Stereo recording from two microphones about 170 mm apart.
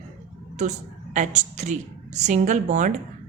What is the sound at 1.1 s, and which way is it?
A woman's voice, 45° right (ahead or behind).